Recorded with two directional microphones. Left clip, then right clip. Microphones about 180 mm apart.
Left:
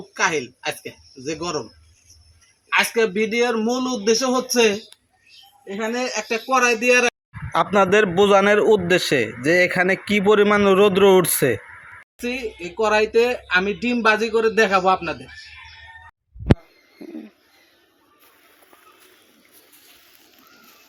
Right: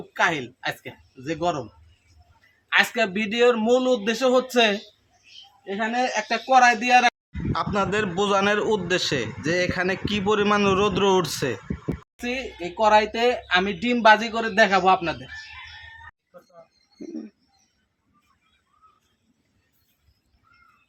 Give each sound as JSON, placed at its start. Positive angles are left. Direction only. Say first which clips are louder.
{"t": 0.1, "sound": "speech", "louder": "left 1 dB", "side_deg": -15}
{"t": 2.7, "sound": "speech", "louder": "left 2 dB", "side_deg": -15}
{"t": 5.7, "sound": "speech", "louder": "even", "side_deg": -10}
{"t": 7.5, "sound": "a man's voice", "louder": "left 8 dB", "side_deg": 30}
{"t": 10.4, "sound": "a man's voice", "louder": "left 4 dB", "side_deg": 10}
{"t": 10.7, "sound": "a man's voice", "louder": "left 6 dB", "side_deg": 25}
{"t": 12.2, "sound": "speech", "louder": "left 2 dB", "side_deg": -15}